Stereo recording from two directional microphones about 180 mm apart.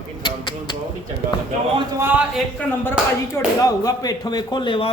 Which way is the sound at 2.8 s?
10° left (ahead or behind).